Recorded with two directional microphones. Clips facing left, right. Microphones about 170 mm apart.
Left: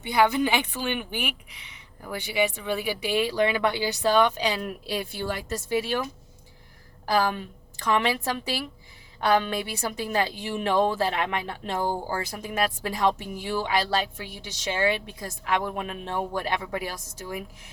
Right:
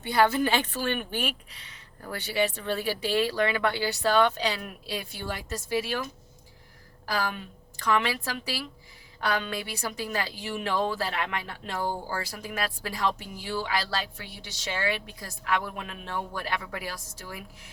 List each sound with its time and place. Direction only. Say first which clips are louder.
0.0 s a woman's voice: left 1 dB; 15° left (ahead or behind)
7.0 s a woman's voice: left 6 dB; 25° left (ahead or behind)